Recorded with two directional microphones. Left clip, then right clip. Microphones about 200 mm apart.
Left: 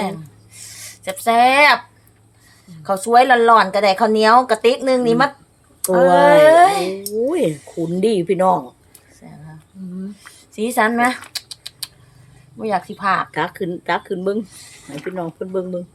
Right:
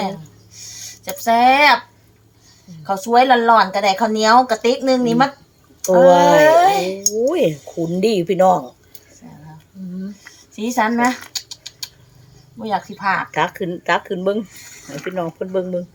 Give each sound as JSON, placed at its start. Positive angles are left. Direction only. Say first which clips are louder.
{"t": 0.5, "sound": "a sound", "louder": "right 3 dB", "side_deg": 45}
{"t": 2.8, "sound": "speech", "louder": "left 1 dB", "side_deg": 40}
{"t": 6.1, "sound": "speech", "louder": "left 1 dB", "side_deg": -10}
{"t": 6.4, "sound": "speech", "louder": "left 1 dB", "side_deg": 45}
{"t": 7.3, "sound": "speech", "louder": "right 2 dB", "side_deg": -10}
{"t": 10.5, "sound": "rodents", "louder": "left 1 dB", "side_deg": 45}
{"t": 12.5, "sound": "speech", "louder": "left 1 dB", "side_deg": 45}
{"t": 13.3, "sound": "speech", "louder": "right 2 dB", "side_deg": -5}